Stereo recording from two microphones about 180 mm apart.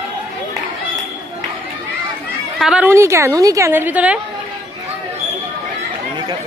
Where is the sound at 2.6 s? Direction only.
5° right (ahead or behind).